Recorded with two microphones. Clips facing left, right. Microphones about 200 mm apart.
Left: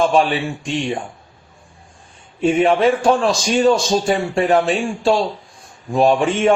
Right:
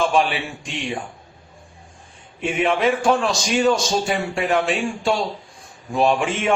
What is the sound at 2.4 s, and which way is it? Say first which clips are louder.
A man's voice: left 6 dB; 35° left (ahead or behind).